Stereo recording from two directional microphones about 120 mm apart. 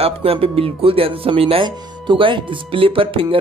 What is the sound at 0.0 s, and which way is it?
Speech, 55° right (ahead or behind).